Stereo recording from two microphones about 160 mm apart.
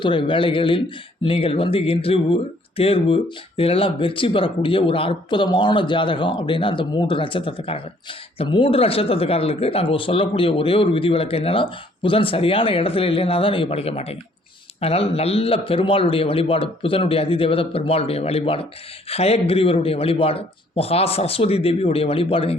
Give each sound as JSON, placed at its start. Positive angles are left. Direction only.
{"t": 0.0, "sound": "speech", "side_deg": 30}